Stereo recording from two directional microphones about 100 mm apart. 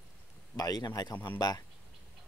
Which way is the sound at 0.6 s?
40° left (ahead or behind).